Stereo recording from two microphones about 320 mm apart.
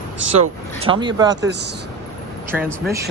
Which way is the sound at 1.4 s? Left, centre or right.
Right.